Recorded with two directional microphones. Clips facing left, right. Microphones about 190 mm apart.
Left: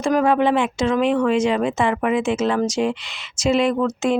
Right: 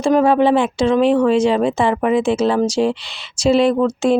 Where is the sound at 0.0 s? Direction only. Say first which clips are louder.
Right 4 dB; 30° right (ahead or behind).